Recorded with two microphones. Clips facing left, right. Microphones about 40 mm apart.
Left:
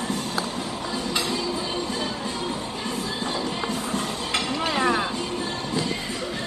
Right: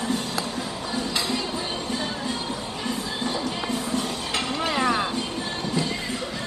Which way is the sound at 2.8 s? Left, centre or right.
Left.